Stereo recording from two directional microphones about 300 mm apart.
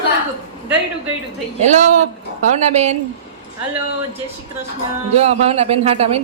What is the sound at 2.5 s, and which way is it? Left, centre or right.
Speech, right.